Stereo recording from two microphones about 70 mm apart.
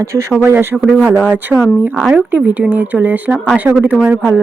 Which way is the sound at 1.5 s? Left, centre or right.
Centre.